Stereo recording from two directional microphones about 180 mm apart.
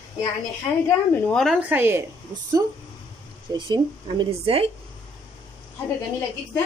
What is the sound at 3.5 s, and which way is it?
Speech, 25° right (ahead or behind).